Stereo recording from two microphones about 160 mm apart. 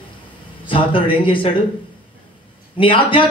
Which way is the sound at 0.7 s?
35° left (ahead or behind).